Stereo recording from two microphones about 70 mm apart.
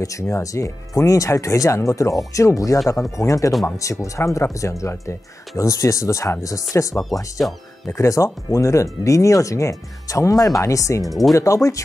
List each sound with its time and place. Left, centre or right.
0.2 s speech: left
7.3 s speech: centre
8.0 s speech: left